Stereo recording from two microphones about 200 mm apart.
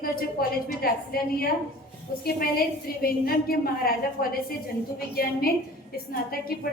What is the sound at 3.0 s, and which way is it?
Speech, 50° left (ahead or behind).